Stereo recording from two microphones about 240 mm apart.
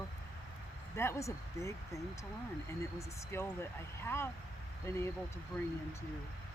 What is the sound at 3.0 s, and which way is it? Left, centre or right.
Speech, centre.